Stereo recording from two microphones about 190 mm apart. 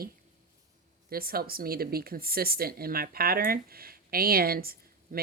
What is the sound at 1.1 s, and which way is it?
Speech, 50° right (ahead or behind).